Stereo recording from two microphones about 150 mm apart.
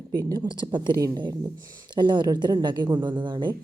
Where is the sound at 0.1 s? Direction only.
25° right (ahead or behind).